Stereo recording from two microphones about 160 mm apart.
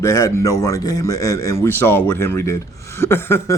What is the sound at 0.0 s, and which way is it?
A man's voice, 20° left (ahead or behind).